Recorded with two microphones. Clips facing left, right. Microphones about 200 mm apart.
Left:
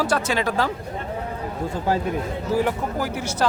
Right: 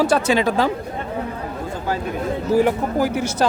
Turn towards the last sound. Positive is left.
turn(degrees=-15)  # may be behind; listen again after turning